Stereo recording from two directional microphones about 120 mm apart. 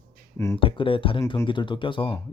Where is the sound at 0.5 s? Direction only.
45° left (ahead or behind).